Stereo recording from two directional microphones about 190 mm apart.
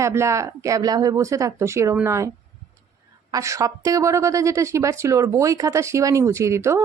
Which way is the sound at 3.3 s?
15° right (ahead or behind).